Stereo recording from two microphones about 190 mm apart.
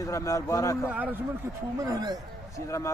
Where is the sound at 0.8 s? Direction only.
10° right (ahead or behind).